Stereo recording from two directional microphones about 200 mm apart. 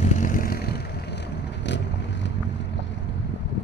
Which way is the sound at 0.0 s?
40° left (ahead or behind).